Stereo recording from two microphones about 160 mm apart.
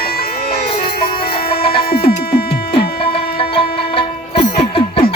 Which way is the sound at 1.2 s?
70° left (ahead or behind).